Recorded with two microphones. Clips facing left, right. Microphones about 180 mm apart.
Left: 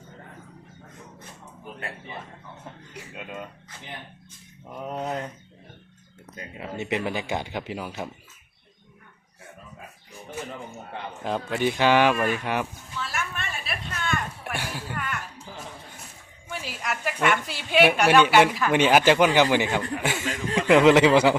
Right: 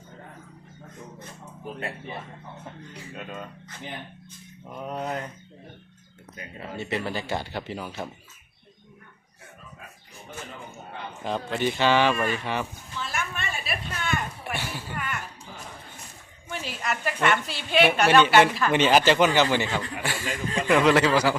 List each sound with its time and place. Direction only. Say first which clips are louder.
3.2 s a woman's voice: even; 10° left (ahead or behind)
4.8 s a woman's voice: left 1 dB; 10° left (ahead or behind)
6.6 s a woman's voice: left 2 dB; 15° left (ahead or behind)
11.2 s a sound: left 1 dB; 5° left (ahead or behind)
14.5 s a sound: left 2 dB; 10° left (ahead or behind)
16.5 s a woman's voice: right 1 dB; 10° left (ahead or behind); by 21.3 s 25° left (ahead or behind)